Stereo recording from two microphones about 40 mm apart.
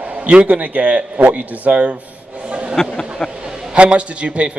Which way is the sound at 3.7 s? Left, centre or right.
Right.